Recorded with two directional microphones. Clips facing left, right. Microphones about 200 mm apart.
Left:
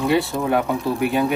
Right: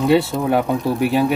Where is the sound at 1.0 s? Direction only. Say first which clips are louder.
Right 3 dB; 20° left (ahead or behind).